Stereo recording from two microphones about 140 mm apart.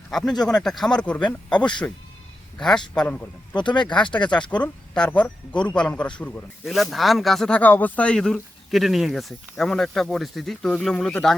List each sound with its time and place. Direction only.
0.1 s speech: 5° left (ahead or behind)
3.5 s speech: 35° left (ahead or behind)
4.3 s speech: 10° left (ahead or behind)